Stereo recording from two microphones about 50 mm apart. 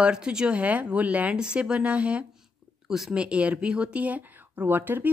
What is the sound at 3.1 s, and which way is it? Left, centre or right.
Speech, right.